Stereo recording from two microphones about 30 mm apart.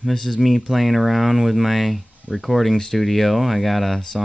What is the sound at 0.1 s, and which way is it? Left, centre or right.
Speech, centre.